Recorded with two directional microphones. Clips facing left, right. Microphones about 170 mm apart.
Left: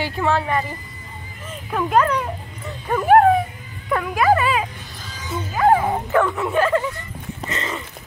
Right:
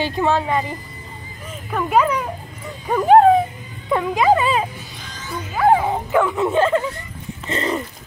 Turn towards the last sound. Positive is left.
turn(degrees=-35)  # may be behind; listen again after turning